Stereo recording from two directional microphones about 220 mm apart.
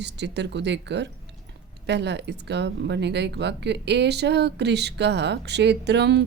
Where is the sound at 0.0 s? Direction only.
50° right (ahead or behind).